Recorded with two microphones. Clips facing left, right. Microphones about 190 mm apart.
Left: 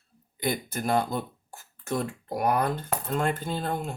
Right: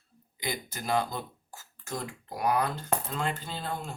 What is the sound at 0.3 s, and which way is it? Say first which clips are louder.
Speech: left 7 dB; 55° left (ahead or behind).